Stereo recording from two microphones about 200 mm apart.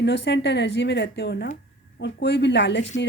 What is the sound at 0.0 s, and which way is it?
Speech, 60° left (ahead or behind).